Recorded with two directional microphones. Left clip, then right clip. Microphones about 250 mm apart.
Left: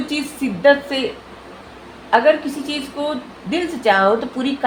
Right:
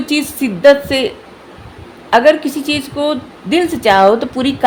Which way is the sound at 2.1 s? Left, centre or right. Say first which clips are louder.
Right 4 dB; right.